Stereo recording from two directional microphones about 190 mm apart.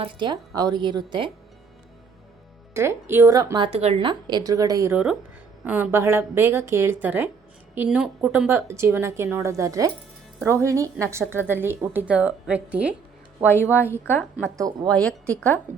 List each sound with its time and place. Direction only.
0.0 s a woman's voice: 25° right (ahead or behind)
2.7 s a woman's voice: 15° right (ahead or behind)
3.7 s a woman's voice: 35° right (ahead or behind); by 12.9 s 5° right (ahead or behind)
13.5 s a woman's voice: 10° left (ahead or behind)